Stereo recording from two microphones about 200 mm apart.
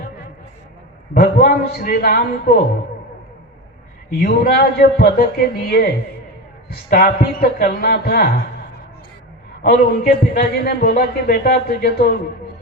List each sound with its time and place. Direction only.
1.1 s a man's voice: 45° left (ahead or behind)
4.2 s a man's voice: 50° left (ahead or behind)
9.6 s a man's voice: 50° left (ahead or behind)